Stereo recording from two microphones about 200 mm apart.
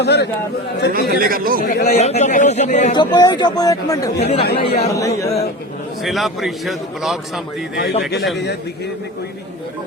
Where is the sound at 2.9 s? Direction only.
20° left (ahead or behind).